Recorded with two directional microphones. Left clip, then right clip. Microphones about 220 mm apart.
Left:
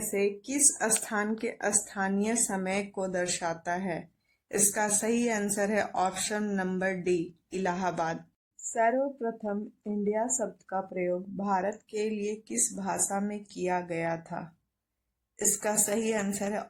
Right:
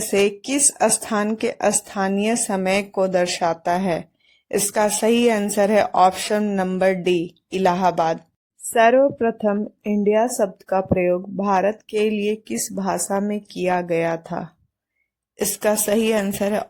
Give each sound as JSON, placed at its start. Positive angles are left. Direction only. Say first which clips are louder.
{"t": 0.1, "sound": "speech", "louder": "right 11 dB", "side_deg": -35}
{"t": 15.6, "sound": "speech", "louder": "right 12 dB", "side_deg": -40}